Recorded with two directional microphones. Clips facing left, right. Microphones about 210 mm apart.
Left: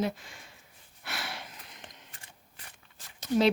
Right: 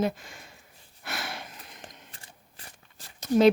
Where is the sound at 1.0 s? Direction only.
50° right (ahead or behind).